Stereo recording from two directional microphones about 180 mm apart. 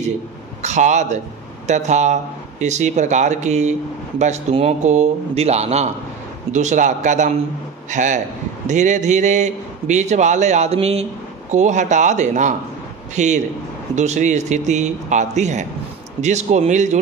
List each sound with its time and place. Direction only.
0.6 s a man's voice: 40° right (ahead or behind)